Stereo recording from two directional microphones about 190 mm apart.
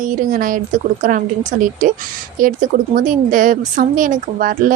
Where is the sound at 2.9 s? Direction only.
45° right (ahead or behind).